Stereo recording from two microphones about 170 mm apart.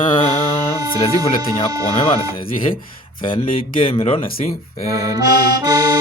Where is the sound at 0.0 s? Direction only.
30° left (ahead or behind).